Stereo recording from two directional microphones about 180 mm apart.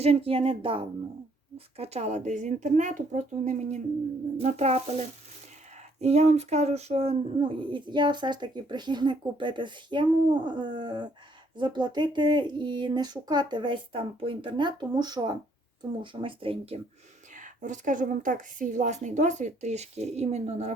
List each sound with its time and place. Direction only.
0.0 s speech: 35° right (ahead or behind)
17.3 s speech: 45° right (ahead or behind)